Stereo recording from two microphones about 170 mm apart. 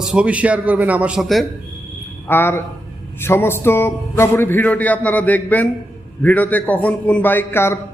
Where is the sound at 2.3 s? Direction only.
15° left (ahead or behind).